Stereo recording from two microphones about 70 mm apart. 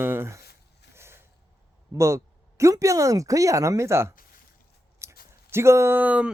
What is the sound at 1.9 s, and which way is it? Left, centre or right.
Speech, right.